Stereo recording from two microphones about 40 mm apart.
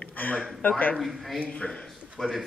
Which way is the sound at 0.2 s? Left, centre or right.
Left.